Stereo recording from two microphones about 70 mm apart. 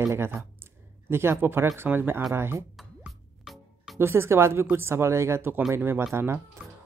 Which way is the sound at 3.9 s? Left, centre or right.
Right.